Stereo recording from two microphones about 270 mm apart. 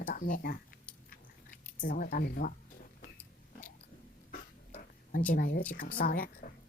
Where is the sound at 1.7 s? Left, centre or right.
Left.